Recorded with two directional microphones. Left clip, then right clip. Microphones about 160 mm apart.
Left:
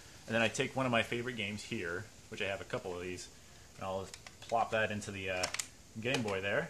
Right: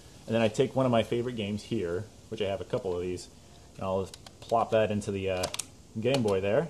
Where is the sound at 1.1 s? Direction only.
40° right (ahead or behind).